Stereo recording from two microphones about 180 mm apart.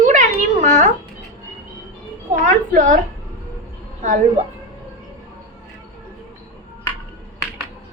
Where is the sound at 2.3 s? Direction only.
45° right (ahead or behind).